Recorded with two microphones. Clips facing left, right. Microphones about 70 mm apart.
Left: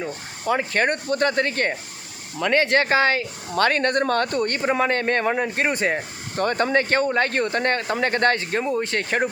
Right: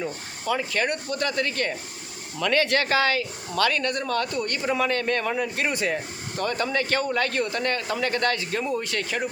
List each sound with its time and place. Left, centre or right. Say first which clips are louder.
0.4 s speech: left 4 dB; left